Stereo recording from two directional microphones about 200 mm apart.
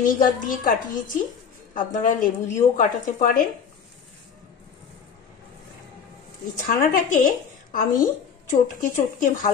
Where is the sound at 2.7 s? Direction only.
40° left (ahead or behind).